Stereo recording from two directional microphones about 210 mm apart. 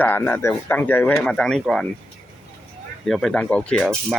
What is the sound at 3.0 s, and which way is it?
Speech, centre (ahead or behind).